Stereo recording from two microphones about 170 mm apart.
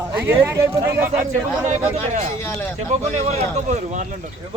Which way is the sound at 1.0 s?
45° right (ahead or behind).